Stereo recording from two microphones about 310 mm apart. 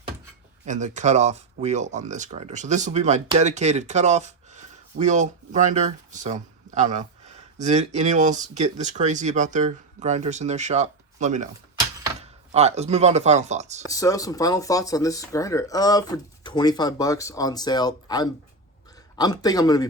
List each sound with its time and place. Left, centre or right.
0.6 s speech: right
13.9 s speech: centre